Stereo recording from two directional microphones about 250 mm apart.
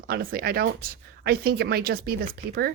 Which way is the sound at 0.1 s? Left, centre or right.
Right.